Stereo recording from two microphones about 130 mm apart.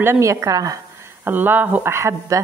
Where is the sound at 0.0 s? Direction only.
20° right (ahead or behind).